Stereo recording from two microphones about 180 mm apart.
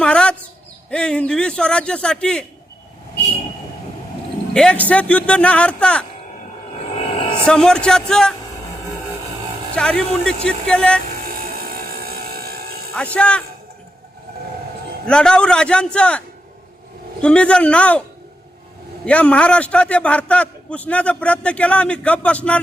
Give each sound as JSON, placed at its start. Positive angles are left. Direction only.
{"t": 0.0, "sound": "a sound", "side_deg": 5}
{"t": 0.9, "sound": "speech", "side_deg": 5}
{"t": 4.5, "sound": "a man's voice", "side_deg": 5}
{"t": 7.4, "sound": "speech", "side_deg": 5}
{"t": 9.7, "sound": "speech", "side_deg": 5}
{"t": 11.3, "sound": "vehicle", "side_deg": -55}
{"t": 12.9, "sound": "a man's voice", "side_deg": 5}
{"t": 15.0, "sound": "speech", "side_deg": 5}
{"t": 17.2, "sound": "a man's voice", "side_deg": 5}
{"t": 19.0, "sound": "a man's voice", "side_deg": 5}